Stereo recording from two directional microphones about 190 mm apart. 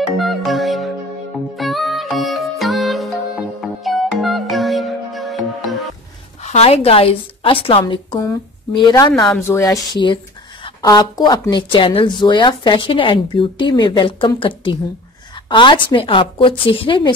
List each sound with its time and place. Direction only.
0.2 s music: centre (ahead or behind)
6.4 s a woman's voice: 35° left (ahead or behind)